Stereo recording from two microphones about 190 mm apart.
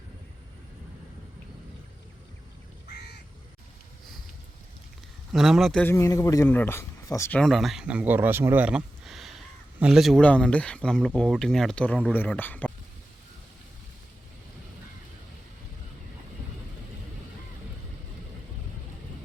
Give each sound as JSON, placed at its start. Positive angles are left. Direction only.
{"t": 2.9, "sound": "crow", "side_deg": 60}
{"t": 5.3, "sound": "a man's voice", "side_deg": 0}